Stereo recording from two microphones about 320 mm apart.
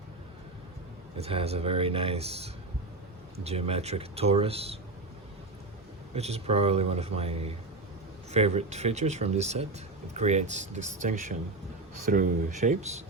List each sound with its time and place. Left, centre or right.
1.2 s speech: centre
6.1 s speech: centre